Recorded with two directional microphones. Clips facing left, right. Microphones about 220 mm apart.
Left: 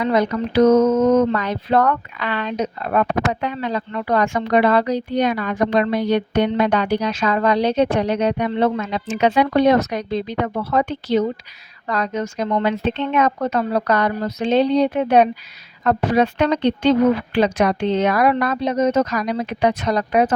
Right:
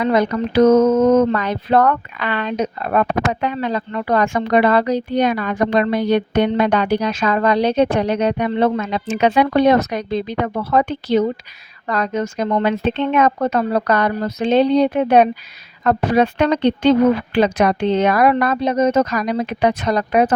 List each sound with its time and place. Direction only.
0.0 s speech: 55° right (ahead or behind)